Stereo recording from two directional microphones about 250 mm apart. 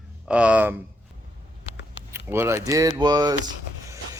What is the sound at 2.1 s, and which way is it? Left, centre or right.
Speech, centre.